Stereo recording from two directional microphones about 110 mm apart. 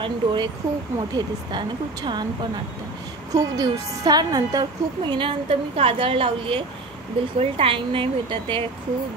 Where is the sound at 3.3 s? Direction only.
35° right (ahead or behind); by 8.6 s 50° right (ahead or behind).